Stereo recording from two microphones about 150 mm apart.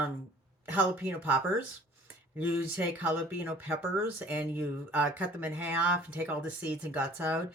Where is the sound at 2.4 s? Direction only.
10° right (ahead or behind).